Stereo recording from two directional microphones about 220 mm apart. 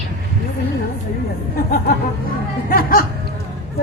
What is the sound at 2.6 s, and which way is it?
Music, 40° left (ahead or behind).